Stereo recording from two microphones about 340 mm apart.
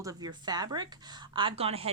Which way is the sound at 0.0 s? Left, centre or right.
Centre.